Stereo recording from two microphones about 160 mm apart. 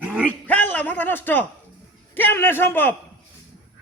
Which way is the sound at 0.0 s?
5° right (ahead or behind).